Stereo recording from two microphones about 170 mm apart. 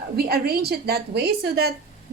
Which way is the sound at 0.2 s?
65° right (ahead or behind).